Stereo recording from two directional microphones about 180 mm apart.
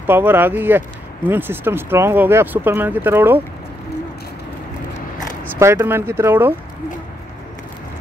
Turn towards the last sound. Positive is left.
turn(degrees=-10)  # may be behind; listen again after turning